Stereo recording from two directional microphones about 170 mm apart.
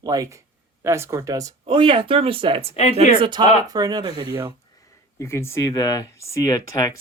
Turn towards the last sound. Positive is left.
turn(degrees=20)  # may be behind; listen again after turning